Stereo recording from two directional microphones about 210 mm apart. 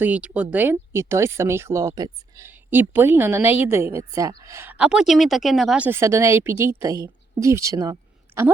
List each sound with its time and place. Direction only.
0.0 s speech: 5° right (ahead or behind)